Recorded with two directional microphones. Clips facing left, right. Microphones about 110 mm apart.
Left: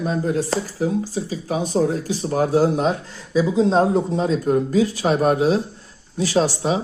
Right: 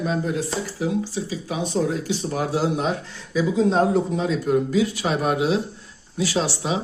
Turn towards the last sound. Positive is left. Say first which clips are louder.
# left 5 dB
turn(degrees=40)  # may be behind; listen again after turning